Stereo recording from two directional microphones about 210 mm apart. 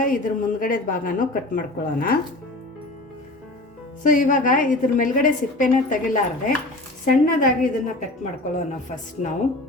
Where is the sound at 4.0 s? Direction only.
40° left (ahead or behind).